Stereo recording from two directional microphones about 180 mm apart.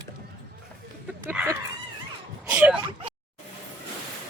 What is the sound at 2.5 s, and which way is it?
Speech, 5° right (ahead or behind).